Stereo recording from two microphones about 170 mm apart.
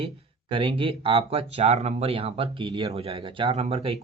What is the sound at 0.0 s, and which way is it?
Speech, 30° right (ahead or behind).